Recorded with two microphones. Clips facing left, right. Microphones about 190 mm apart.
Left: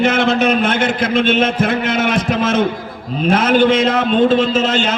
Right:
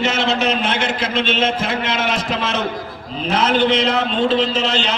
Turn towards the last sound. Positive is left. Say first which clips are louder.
# left 4 dB
turn(degrees=50)  # may be behind; listen again after turning